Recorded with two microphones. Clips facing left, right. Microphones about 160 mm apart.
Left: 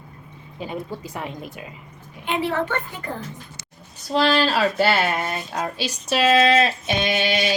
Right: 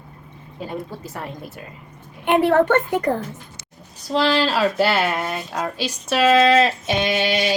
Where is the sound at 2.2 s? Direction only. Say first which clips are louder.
Right 8 dB; 60° right (ahead or behind).